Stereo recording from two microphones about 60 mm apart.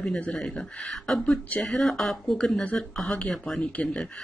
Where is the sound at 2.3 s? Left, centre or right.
Centre.